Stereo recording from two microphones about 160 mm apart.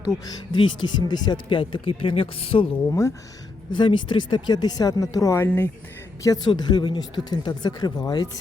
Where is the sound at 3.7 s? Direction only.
30° left (ahead or behind).